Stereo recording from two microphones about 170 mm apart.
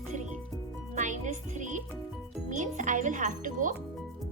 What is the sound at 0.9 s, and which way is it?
Music, 45° right (ahead or behind).